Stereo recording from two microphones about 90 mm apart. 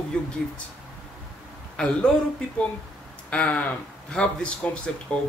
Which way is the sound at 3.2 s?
15° left (ahead or behind).